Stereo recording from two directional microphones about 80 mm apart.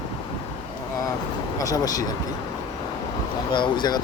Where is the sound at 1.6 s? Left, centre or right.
Left.